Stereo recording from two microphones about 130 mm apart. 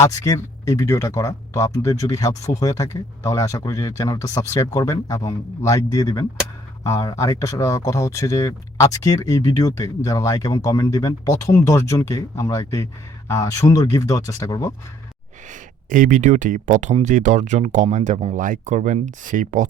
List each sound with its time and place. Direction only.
0.0 s speech: 25° left (ahead or behind)
15.4 s speech: 75° right (ahead or behind)
18.3 s speech: 80° right